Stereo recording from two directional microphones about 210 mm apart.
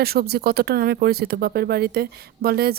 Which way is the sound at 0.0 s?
45° right (ahead or behind).